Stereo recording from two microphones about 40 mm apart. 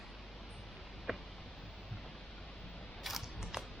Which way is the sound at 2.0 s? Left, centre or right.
Centre.